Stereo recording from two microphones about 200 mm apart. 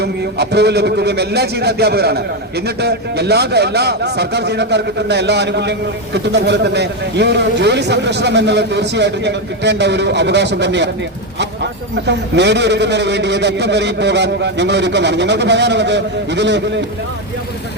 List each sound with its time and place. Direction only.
0.0 s a man's voice: 55° right (ahead or behind)
12.0 s a man's voice: 60° right (ahead or behind)